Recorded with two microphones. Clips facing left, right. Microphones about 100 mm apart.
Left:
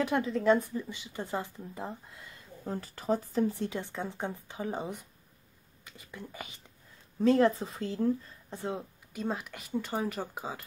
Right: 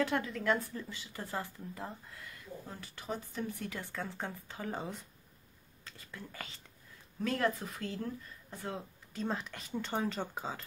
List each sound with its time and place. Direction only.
0.0 s speech: 20° left (ahead or behind)
2.6 s speech: 40° left (ahead or behind); by 10.6 s 10° left (ahead or behind)